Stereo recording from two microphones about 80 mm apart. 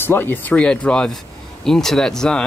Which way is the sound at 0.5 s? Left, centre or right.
Centre.